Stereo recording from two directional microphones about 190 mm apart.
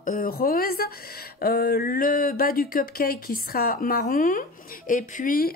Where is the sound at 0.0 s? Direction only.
45° left (ahead or behind).